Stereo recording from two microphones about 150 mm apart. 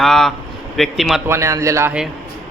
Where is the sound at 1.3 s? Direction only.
20° right (ahead or behind).